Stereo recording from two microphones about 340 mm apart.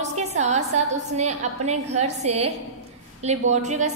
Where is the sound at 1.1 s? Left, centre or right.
Centre.